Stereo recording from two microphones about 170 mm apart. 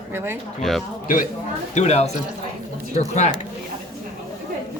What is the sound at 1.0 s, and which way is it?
Speech, 50° left (ahead or behind).